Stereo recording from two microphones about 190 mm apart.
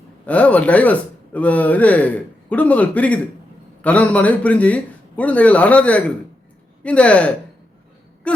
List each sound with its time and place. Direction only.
0.3 s speech: 5° left (ahead or behind)